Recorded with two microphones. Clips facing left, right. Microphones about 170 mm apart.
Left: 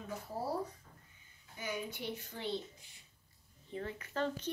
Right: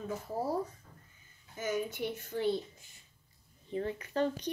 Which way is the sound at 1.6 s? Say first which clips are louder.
Right 7 dB; 45° right (ahead or behind).